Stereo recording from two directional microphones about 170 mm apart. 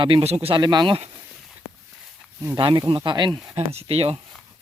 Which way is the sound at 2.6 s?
30° right (ahead or behind).